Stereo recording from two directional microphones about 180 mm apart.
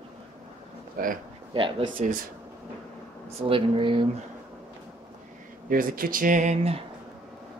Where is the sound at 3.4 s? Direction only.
30° right (ahead or behind).